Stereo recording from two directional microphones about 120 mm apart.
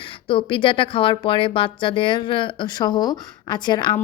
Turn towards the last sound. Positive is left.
turn(degrees=35)  # may be behind; listen again after turning